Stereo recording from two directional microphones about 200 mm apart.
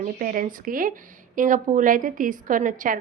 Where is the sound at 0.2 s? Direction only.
45° right (ahead or behind).